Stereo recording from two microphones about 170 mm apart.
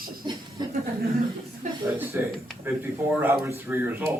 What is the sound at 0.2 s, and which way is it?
Speech, 25° right (ahead or behind).